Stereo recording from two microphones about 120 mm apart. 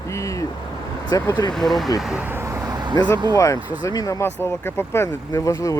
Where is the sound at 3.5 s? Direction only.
15° right (ahead or behind).